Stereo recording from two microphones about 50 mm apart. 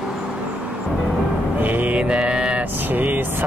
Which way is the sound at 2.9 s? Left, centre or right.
Right.